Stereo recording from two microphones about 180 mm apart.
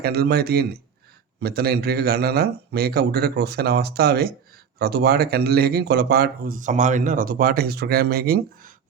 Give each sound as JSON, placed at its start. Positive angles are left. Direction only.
{"t": 0.0, "sound": "speech", "side_deg": -60}